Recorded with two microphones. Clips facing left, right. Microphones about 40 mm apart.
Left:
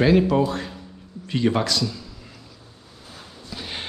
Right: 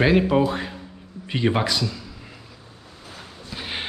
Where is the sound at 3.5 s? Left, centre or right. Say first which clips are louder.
Right 2 dB; centre.